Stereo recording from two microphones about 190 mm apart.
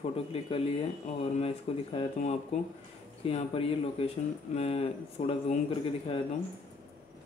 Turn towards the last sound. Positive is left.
turn(degrees=30)  # may be behind; listen again after turning